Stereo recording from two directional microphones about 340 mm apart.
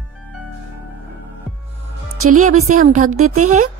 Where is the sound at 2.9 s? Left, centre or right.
Right.